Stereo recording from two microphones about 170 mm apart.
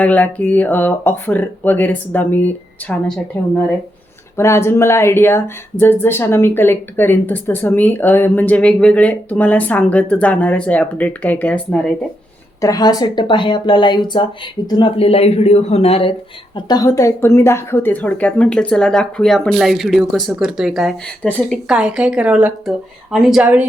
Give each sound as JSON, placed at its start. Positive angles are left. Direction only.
{"t": 0.0, "sound": "speech", "side_deg": 10}
{"t": 4.4, "sound": "speech", "side_deg": 15}
{"t": 12.6, "sound": "speech", "side_deg": 20}
{"t": 16.6, "sound": "speech", "side_deg": 25}
{"t": 21.2, "sound": "speech", "side_deg": 10}
{"t": 21.7, "sound": "a woman's voice", "side_deg": -5}